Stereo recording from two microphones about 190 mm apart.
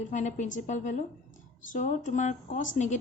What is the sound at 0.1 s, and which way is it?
Speech, 40° left (ahead or behind).